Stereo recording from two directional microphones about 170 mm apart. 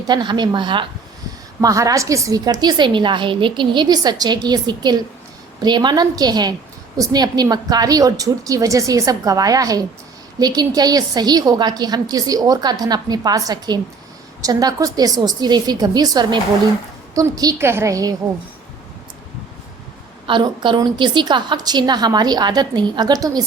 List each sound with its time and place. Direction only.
0.1 s a woman's voice: 25° right (ahead or behind)
20.2 s a woman's voice: 30° right (ahead or behind)